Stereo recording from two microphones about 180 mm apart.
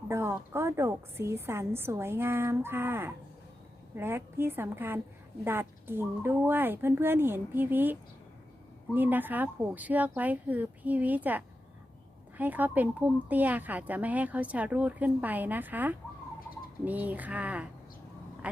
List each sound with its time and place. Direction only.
0.1 s speech: 15° right (ahead or behind)
9.0 s speech: 10° right (ahead or behind)